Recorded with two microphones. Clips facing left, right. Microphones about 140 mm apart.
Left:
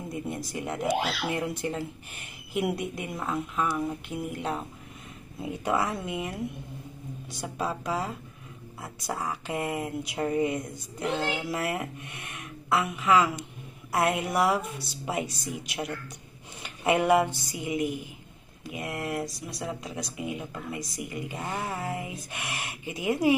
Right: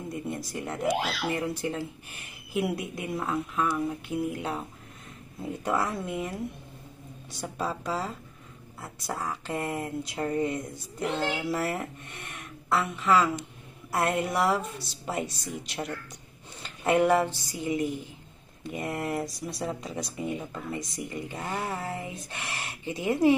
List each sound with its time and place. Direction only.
0.1 s speech: centre (ahead or behind)
18.6 s speech: 5° left (ahead or behind)